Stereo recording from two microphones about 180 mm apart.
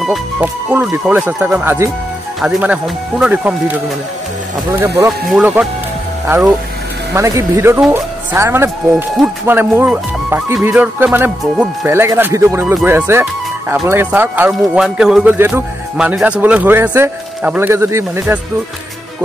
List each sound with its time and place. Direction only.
0.0 s speech: 5° right (ahead or behind)
4.7 s speech: 15° right (ahead or behind)
5.3 s speech: 5° right (ahead or behind)